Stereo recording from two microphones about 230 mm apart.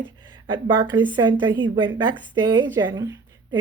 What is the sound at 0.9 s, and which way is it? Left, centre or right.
A woman's voice, centre.